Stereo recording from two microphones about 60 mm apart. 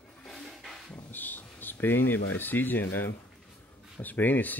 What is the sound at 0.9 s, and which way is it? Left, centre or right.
Speech, left.